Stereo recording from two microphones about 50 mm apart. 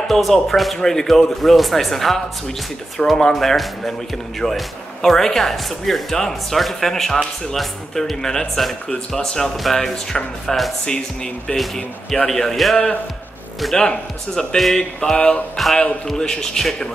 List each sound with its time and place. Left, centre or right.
0.1 s a man's voice: centre
12.3 s speech: centre
13.7 s speech: centre
15.5 s a man's voice: centre